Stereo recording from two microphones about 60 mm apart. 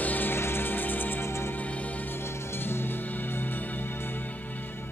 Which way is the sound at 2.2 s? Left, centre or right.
Left.